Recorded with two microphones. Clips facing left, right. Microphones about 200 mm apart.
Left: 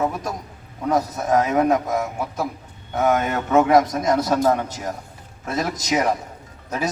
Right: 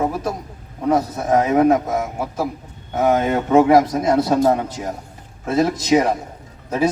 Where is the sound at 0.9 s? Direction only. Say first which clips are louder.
Right 3 dB; 25° right (ahead or behind).